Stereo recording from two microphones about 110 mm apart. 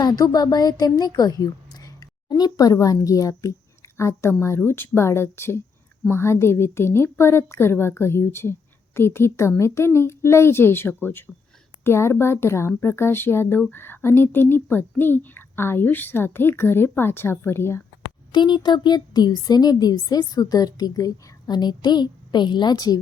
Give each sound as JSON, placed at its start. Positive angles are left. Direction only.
{"t": 0.0, "sound": "a woman's voice", "side_deg": 35}
{"t": 18.3, "sound": "speech", "side_deg": 45}